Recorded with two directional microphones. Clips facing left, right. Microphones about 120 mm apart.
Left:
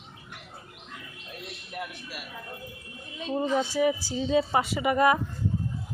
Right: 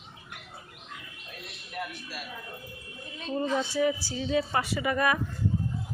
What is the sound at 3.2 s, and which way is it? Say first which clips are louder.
A woman's voice: left 2 dB; 15° left (ahead or behind).